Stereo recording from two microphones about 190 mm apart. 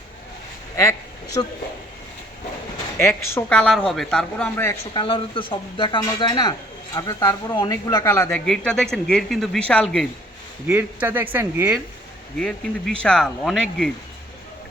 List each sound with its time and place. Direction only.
0.8 s speech: 15° left (ahead or behind)
3.3 s a man's voice: 5° left (ahead or behind)
4.9 s speech: 25° left (ahead or behind)
8.4 s a man's voice: centre (ahead or behind)
10.7 s speech: 10° right (ahead or behind)
12.4 s a man's voice: 5° left (ahead or behind)